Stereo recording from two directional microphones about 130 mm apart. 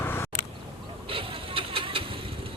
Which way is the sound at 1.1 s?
45° right (ahead or behind).